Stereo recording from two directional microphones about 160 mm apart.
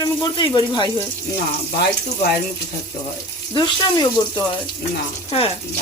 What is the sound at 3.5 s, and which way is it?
Speech, 25° left (ahead or behind).